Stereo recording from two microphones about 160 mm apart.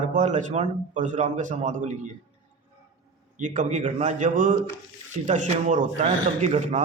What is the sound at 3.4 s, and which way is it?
A man's voice, 50° right (ahead or behind).